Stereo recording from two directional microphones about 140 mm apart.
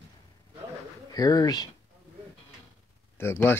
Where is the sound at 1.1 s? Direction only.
25° left (ahead or behind).